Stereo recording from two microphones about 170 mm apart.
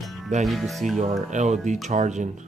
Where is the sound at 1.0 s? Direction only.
40° right (ahead or behind).